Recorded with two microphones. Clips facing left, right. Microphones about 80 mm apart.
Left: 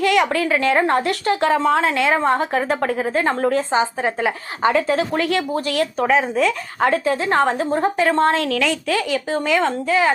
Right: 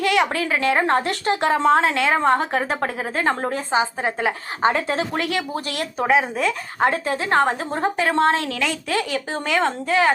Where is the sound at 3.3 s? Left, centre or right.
Right.